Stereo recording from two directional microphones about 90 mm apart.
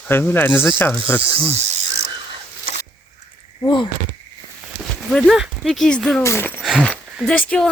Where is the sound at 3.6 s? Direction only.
60° left (ahead or behind).